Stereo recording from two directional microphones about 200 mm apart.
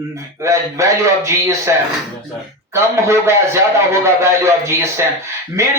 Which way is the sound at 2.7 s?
15° right (ahead or behind).